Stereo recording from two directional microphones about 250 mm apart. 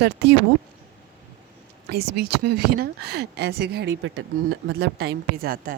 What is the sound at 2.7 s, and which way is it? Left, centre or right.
Speech, right.